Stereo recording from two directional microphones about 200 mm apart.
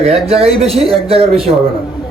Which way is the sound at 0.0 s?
30° right (ahead or behind).